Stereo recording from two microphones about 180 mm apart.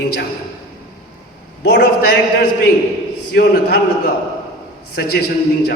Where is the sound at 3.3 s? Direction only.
65° left (ahead or behind).